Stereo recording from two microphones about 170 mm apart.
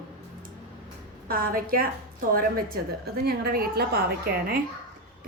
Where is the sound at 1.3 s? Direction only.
55° right (ahead or behind).